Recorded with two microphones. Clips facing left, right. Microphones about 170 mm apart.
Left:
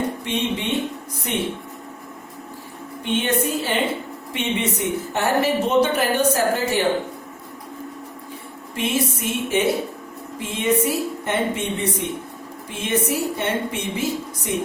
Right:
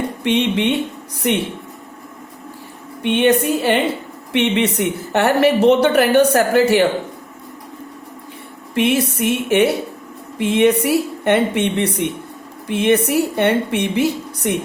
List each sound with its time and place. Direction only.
0.3 s a woman's voice: 70° right (ahead or behind)
3.0 s a woman's voice: 65° right (ahead or behind)
8.7 s a woman's voice: 65° right (ahead or behind)